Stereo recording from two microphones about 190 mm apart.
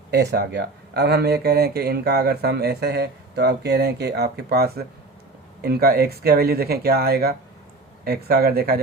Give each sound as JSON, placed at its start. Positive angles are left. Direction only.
{"t": 0.1, "sound": "speech", "side_deg": -60}